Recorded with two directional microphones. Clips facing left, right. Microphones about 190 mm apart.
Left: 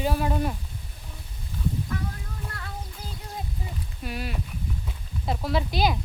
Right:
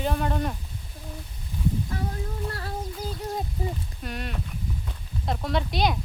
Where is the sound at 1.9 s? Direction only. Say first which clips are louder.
Right 1 dB; 30° right (ahead or behind).